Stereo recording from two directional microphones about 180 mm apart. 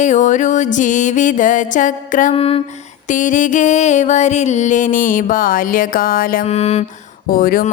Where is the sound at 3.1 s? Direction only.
45° left (ahead or behind).